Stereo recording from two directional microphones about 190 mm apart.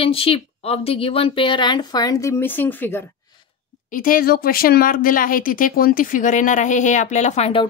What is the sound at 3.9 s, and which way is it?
Speech, 45° left (ahead or behind).